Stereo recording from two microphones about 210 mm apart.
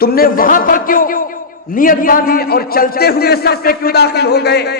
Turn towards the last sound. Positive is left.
turn(degrees=50)  # may be behind; listen again after turning